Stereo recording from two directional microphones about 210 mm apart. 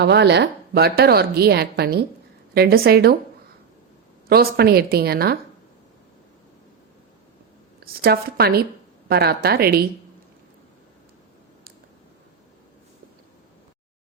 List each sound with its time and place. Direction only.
0.0 s a woman's voice: 55° right (ahead or behind)
4.3 s a woman's voice: 45° right (ahead or behind)
7.8 s a woman's voice: 45° right (ahead or behind)